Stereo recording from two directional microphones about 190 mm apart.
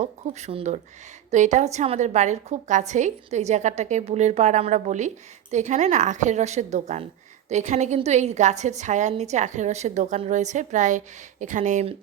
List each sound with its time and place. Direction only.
0.0 s a woman's voice: 35° right (ahead or behind)